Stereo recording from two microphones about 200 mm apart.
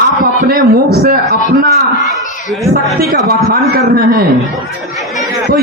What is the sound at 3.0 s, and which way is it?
A man's voice, 50° right (ahead or behind).